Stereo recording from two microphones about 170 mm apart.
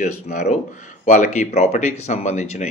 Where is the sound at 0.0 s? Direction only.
45° left (ahead or behind).